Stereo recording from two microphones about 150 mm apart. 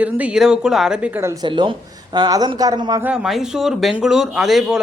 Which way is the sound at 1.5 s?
35° right (ahead or behind).